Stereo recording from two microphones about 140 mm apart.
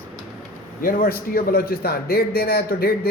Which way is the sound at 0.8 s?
90° left.